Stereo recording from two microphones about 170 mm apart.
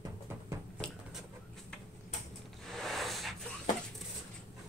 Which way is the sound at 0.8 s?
5° left (ahead or behind).